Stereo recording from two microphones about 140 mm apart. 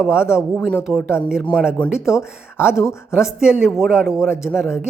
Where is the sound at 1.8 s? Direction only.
10° left (ahead or behind).